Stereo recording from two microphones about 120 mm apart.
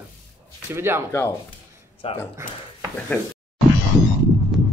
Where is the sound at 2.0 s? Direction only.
60° left (ahead or behind).